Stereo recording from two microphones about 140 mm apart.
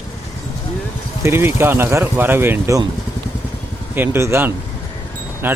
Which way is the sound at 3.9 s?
15° right (ahead or behind).